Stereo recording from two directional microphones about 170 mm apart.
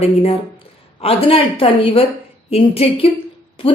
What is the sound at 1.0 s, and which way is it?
Speech, 35° left (ahead or behind).